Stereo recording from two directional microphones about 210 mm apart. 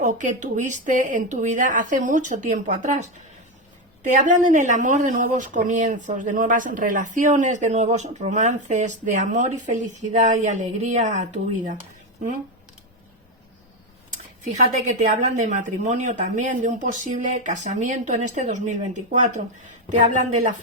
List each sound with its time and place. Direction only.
0.0 s speech: 35° right (ahead or behind)
14.7 s speech: 35° right (ahead or behind)